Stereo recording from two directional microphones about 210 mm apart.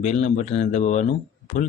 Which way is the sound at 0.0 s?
30° left (ahead or behind).